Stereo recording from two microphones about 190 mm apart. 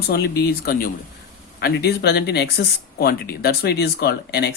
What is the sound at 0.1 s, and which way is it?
Speech, 55° left (ahead or behind).